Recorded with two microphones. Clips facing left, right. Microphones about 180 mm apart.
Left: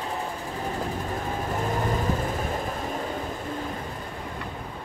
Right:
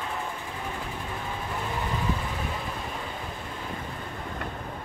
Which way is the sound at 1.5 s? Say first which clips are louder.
Left 5 dB; 45° left (ahead or behind).